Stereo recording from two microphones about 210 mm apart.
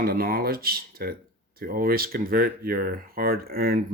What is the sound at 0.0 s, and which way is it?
Speech, 45° right (ahead or behind).